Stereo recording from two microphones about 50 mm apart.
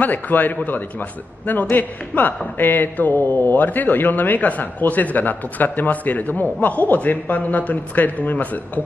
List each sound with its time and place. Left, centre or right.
0.0 s a man's voice: left